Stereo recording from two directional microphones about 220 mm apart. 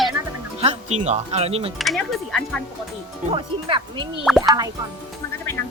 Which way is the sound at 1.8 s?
Centre (ahead or behind).